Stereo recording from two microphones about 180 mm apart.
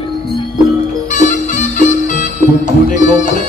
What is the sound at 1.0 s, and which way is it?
Music, 40° left (ahead or behind).